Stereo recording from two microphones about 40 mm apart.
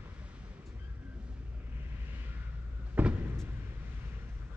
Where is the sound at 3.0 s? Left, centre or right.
Right.